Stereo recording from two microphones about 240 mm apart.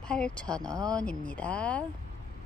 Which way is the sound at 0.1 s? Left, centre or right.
Centre.